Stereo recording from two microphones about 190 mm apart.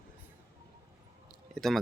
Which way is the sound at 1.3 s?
Centre (ahead or behind).